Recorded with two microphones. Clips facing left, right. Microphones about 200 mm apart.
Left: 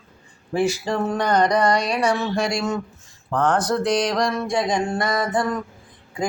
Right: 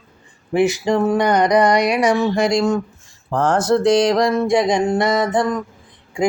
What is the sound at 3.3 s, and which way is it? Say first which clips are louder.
Speech: right 4 dB; 25° right (ahead or behind).